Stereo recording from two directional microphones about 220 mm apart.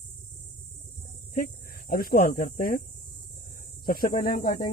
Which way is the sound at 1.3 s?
40° left (ahead or behind).